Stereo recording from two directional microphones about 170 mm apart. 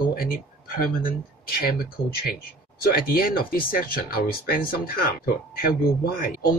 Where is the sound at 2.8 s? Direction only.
60° left (ahead or behind).